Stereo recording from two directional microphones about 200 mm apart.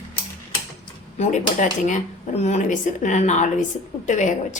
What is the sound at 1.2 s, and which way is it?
Speech, 35° left (ahead or behind).